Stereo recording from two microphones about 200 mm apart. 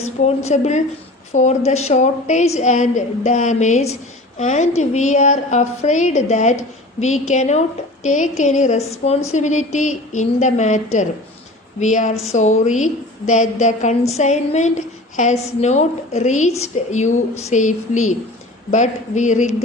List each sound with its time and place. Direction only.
0.0 s a woman's voice: 35° left (ahead or behind)
11.8 s a woman's voice: 40° left (ahead or behind)